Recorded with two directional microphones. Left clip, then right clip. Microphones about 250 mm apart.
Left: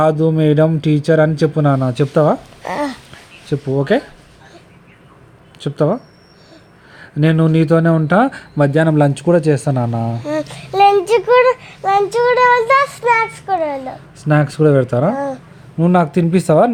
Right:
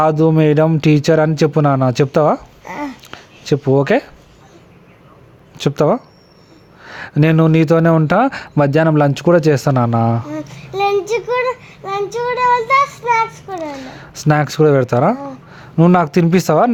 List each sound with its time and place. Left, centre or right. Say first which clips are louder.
0.0 s speech: right 1 dB; right
2.6 s babbling: left 5 dB; left
3.4 s speech: right 5 dB; right
5.5 s speech: right 3 dB; right
10.2 s child singing: left 6 dB; left
12.6 s a sound: left 1 dB; left
14.3 s speech: right 1 dB; right